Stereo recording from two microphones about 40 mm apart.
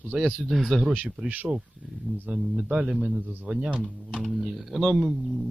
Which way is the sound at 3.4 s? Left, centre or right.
Right.